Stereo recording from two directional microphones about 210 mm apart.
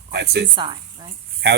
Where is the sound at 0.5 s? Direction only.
20° right (ahead or behind).